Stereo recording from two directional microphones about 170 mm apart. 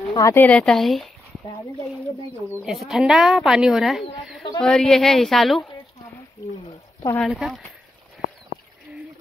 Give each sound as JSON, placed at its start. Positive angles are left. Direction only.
{"t": 0.1, "sound": "speech", "side_deg": 15}
{"t": 2.6, "sound": "speech", "side_deg": 0}
{"t": 6.6, "sound": "pour", "side_deg": 35}
{"t": 7.2, "sound": "speech", "side_deg": -5}